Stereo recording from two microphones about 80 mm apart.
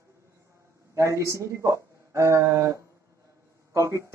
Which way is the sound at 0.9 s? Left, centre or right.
Right.